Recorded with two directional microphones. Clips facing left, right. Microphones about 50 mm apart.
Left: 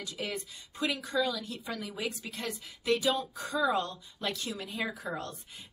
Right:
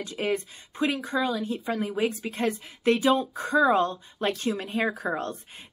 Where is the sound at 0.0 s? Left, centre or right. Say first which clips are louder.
Right 9 dB; right.